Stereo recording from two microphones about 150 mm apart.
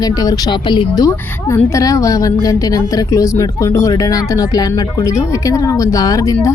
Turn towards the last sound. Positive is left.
turn(degrees=25)  # may be behind; listen again after turning